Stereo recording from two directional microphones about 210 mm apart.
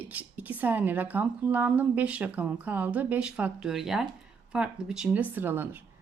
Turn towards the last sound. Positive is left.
turn(degrees=-10)  # may be behind; listen again after turning